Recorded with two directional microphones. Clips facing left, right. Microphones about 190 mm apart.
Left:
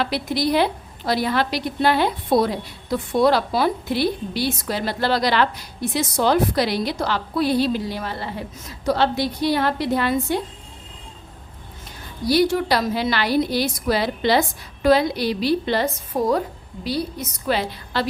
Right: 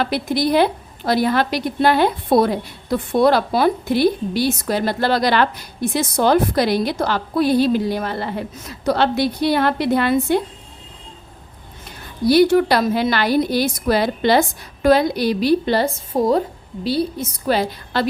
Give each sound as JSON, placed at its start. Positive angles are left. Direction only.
{"t": 0.0, "sound": "a woman's voice", "side_deg": -50}
{"t": 12.3, "sound": "a woman's voice", "side_deg": -60}
{"t": 17.5, "sound": "a woman's voice", "side_deg": -40}